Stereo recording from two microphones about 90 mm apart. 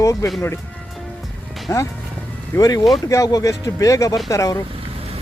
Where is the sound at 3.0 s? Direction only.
40° left (ahead or behind).